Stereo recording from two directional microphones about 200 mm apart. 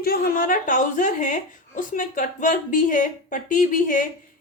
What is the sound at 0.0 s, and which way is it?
A woman's voice, 50° left (ahead or behind).